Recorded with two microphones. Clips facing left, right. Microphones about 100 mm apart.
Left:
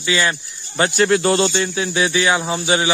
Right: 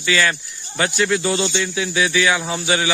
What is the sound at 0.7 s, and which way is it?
Speech, 40° left (ahead or behind).